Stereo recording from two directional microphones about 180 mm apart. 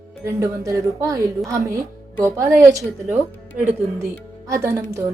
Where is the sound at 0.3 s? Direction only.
15° right (ahead or behind).